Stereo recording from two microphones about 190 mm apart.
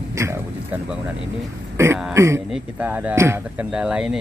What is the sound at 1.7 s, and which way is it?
Speech, 15° right (ahead or behind).